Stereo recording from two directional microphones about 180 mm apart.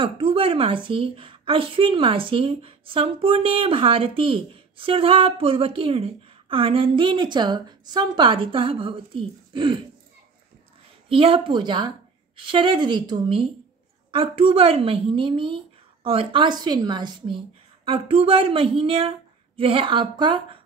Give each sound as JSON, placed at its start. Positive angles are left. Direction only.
{"t": 0.0, "sound": "a woman's voice", "side_deg": -30}
{"t": 11.1, "sound": "a woman's voice", "side_deg": -30}